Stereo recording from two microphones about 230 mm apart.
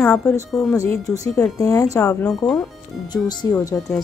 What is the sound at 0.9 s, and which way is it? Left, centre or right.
Speech, centre.